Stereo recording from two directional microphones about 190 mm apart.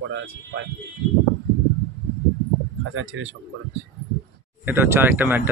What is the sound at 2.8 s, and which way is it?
Speech, 90° right.